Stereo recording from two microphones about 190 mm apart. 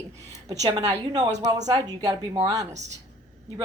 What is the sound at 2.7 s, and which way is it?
Speech, 35° right (ahead or behind).